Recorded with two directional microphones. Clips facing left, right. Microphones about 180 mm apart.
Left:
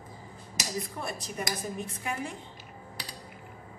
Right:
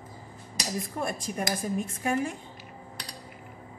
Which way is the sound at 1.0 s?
50° right (ahead or behind).